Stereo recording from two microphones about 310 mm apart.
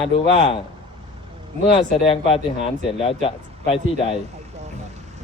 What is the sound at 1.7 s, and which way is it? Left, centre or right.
Speech, centre.